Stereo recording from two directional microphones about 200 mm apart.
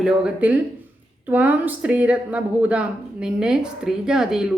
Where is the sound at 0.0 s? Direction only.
5° right (ahead or behind).